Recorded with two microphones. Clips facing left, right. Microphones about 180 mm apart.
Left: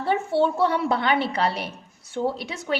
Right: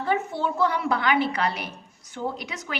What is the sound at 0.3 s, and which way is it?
A woman's voice, 30° left (ahead or behind).